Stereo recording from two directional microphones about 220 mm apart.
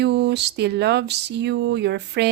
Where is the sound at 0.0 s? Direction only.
50° right (ahead or behind).